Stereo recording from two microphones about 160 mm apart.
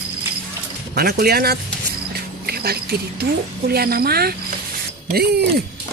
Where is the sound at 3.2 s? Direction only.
75° right (ahead or behind).